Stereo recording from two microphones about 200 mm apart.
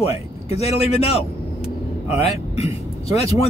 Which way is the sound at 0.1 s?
30° left (ahead or behind).